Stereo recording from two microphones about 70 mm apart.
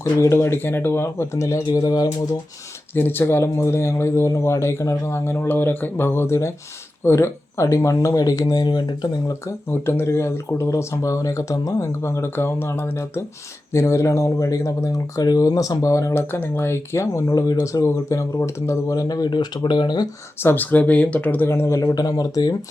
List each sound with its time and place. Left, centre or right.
0.0 s speech: left
1.6 s speech: left
2.9 s speech: left
8.2 s speech: left
9.6 s speech: left
16.1 s speech: left
17.3 s speech: left
18.9 s speech: left
20.4 s speech: left
21.8 s speech: left